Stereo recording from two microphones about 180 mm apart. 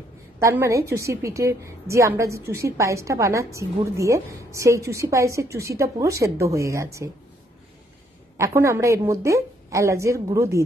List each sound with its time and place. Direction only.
0.4 s a woman's voice: 15° right (ahead or behind)
8.4 s a woman's voice: 15° right (ahead or behind)